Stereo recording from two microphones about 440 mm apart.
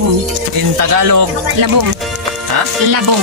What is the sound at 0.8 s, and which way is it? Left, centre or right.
Speech, right.